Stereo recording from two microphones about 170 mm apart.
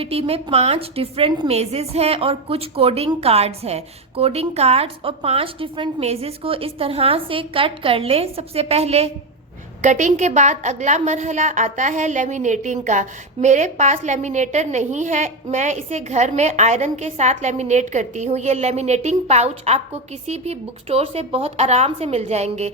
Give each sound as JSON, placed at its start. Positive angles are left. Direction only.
{"t": 0.0, "sound": "a woman's voice", "side_deg": -35}